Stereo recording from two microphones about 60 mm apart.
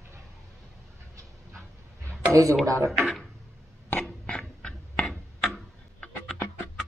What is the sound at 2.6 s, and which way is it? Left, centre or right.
Speech, right.